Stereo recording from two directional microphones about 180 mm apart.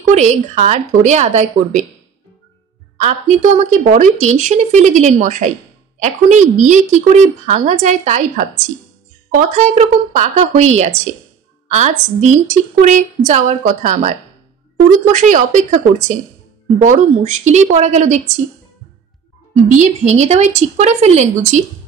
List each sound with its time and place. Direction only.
0.1 s speech: 40° right (ahead or behind)
3.0 s a woman's voice: 40° right (ahead or behind)
16.8 s speech: 45° right (ahead or behind)
19.5 s speech: 40° right (ahead or behind)